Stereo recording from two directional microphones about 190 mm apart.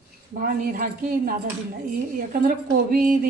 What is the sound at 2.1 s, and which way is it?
A woman's voice, 45° right (ahead or behind).